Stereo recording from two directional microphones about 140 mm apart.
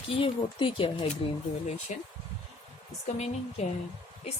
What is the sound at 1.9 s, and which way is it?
Speech, 55° left (ahead or behind).